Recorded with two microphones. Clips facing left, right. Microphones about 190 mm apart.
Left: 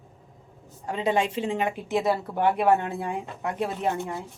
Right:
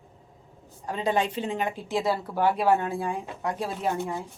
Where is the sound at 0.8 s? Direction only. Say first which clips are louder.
Left 1 dB; 25° left (ahead or behind).